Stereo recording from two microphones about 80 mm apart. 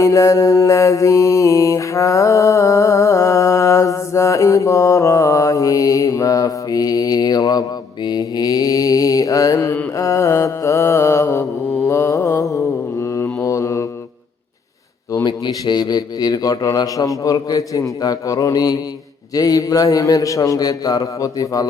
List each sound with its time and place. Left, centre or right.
0.0 s mantra: left
15.3 s a man's voice: left